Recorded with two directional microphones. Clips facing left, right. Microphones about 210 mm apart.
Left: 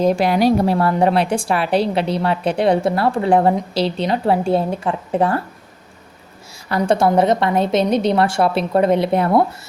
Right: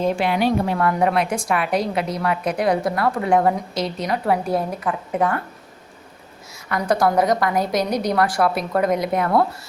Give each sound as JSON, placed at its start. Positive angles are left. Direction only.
{"t": 0.0, "sound": "a woman's voice", "side_deg": 40}
{"t": 6.7, "sound": "a woman's voice", "side_deg": 30}